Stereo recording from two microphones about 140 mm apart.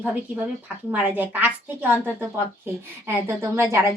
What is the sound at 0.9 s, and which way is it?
A woman's voice, 10° right (ahead or behind).